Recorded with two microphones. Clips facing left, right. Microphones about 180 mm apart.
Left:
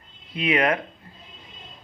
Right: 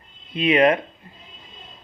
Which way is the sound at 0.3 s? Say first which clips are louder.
Right 5 dB; 25° right (ahead or behind).